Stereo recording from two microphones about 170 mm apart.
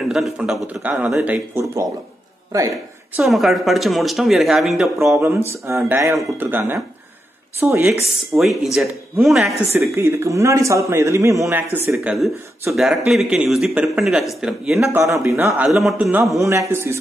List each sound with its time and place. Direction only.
0.1 s a man's voice: centre (ahead or behind)
3.3 s speech: centre (ahead or behind)
4.9 s a man's voice: 15° right (ahead or behind)
9.8 s a man's voice: 15° right (ahead or behind)
14.8 s a man's voice: 15° right (ahead or behind)
16.4 s a man's voice: 15° right (ahead or behind)